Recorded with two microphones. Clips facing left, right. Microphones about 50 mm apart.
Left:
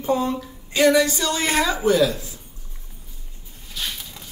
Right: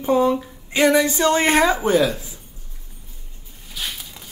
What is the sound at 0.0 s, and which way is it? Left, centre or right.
A woman's voice, centre.